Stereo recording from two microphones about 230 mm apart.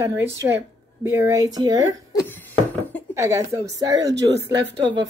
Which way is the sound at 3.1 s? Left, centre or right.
Centre.